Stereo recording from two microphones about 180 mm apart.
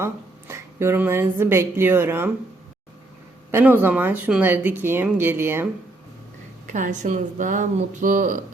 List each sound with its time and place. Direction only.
0.0 s speech: 15° right (ahead or behind)
3.5 s speech: 10° right (ahead or behind)
6.7 s speech: 45° right (ahead or behind)